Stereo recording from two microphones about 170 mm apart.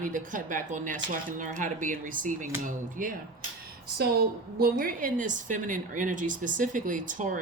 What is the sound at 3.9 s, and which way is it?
A woman's voice, 65° right (ahead or behind).